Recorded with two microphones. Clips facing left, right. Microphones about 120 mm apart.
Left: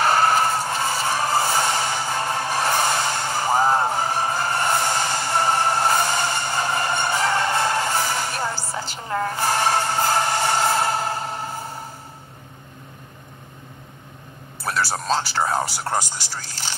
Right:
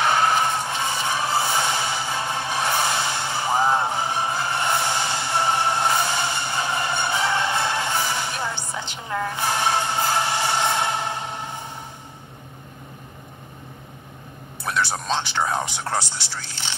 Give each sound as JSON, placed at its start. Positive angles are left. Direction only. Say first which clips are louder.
{"t": 0.0, "sound": "music", "louder": "left 2 dB", "side_deg": 0}
{"t": 2.5, "sound": "vehicle", "louder": "left 1 dB", "side_deg": 0}
{"t": 3.9, "sound": "music", "louder": "left 2 dB", "side_deg": 45}
{"t": 4.5, "sound": "music", "louder": "left 2 dB", "side_deg": 0}
{"t": 6.3, "sound": "music", "louder": "left 2 dB", "side_deg": 45}
{"t": 6.8, "sound": "music", "louder": "left 2 dB", "side_deg": 0}
{"t": 14.6, "sound": "speech", "louder": "left 1 dB", "side_deg": 0}
{"t": 16.1, "sound": "speech", "louder": "left 1 dB", "side_deg": 45}